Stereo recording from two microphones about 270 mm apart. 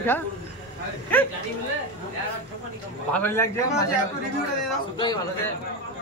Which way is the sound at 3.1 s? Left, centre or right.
Centre.